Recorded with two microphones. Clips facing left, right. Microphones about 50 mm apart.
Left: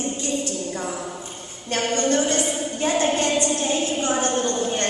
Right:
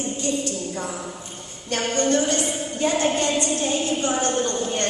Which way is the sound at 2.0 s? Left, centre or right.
Left.